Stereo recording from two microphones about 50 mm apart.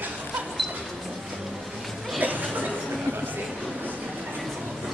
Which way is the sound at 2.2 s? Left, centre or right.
Right.